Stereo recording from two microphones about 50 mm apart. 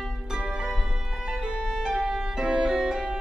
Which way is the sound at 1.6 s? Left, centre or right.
Centre.